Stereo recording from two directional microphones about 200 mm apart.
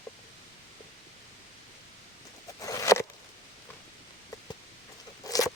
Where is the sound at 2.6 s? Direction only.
15° left (ahead or behind).